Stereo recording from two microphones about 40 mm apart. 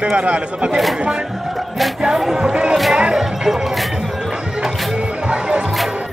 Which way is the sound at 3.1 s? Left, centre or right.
Centre.